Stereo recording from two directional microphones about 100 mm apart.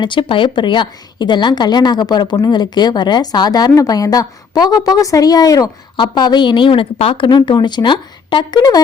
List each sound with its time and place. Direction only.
0.0 s a woman's voice: 55° left (ahead or behind); by 5.7 s 35° left (ahead or behind)
6.0 s a woman's voice: 45° left (ahead or behind)